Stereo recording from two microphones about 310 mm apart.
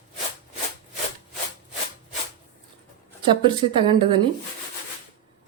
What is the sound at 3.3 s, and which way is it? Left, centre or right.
Speech, centre.